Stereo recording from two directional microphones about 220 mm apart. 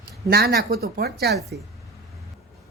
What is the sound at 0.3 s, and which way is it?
Speech, 45° right (ahead or behind).